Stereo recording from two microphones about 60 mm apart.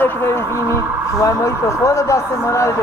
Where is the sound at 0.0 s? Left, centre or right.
Left.